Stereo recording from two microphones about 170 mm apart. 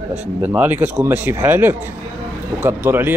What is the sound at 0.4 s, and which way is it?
A man's voice, 10° right (ahead or behind).